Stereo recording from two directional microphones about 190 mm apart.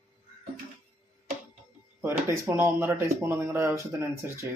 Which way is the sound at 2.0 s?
15° right (ahead or behind).